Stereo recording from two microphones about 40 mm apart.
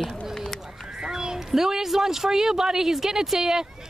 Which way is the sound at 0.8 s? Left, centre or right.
Centre.